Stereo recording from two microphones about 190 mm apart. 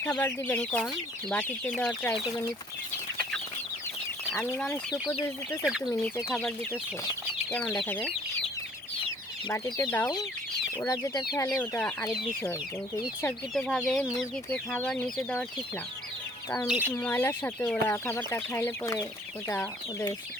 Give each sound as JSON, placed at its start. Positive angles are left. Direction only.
{"t": 0.0, "sound": "speech", "side_deg": 10}
{"t": 4.3, "sound": "speech", "side_deg": 10}
{"t": 5.6, "sound": "speech", "side_deg": -5}
{"t": 5.9, "sound": "speech", "side_deg": 15}
{"t": 6.3, "sound": "speech", "side_deg": 5}
{"t": 7.8, "sound": "speech", "side_deg": 5}
{"t": 9.5, "sound": "speech", "side_deg": 20}
{"t": 11.4, "sound": "speech", "side_deg": 10}
{"t": 13.2, "sound": "speech", "side_deg": 5}
{"t": 16.6, "sound": "speech", "side_deg": -10}
{"t": 17.0, "sound": "speech", "side_deg": 10}